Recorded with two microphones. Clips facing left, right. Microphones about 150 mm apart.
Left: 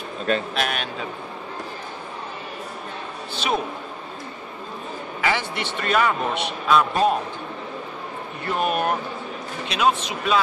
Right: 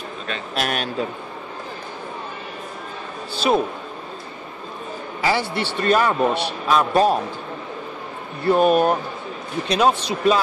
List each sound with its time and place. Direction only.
0.6 s a man's voice: 45° right (ahead or behind)
5.2 s a man's voice: 35° right (ahead or behind)
8.5 s a man's voice: 35° right (ahead or behind)